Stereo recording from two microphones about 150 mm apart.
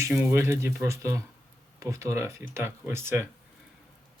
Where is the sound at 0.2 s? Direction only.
20° right (ahead or behind).